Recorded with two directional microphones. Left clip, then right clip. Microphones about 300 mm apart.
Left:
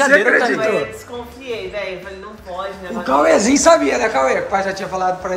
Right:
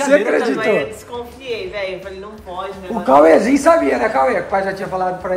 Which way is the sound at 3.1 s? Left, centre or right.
Centre.